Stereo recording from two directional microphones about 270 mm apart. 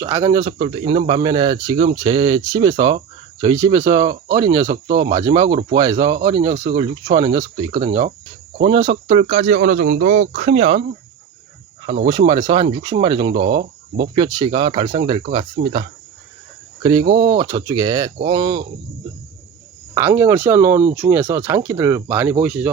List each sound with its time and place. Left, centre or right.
0.0 s speech: centre
4.9 s speech: right
5.1 s speech: centre
12.0 s speech: centre
19.9 s speech: centre